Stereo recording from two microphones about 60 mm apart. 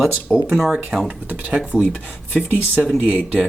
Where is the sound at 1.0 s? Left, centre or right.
Right.